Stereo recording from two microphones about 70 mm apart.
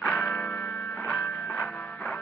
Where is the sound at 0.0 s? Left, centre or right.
Centre.